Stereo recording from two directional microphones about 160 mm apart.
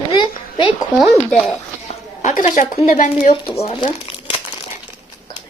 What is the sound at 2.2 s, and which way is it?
Speech, 55° left (ahead or behind).